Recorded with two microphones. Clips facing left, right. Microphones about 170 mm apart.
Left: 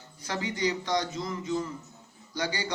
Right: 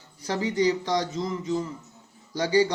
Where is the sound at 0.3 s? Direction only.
30° right (ahead or behind).